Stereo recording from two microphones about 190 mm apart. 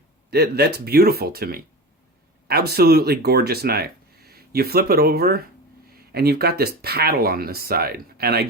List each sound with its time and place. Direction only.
0.3 s speech: 55° right (ahead or behind)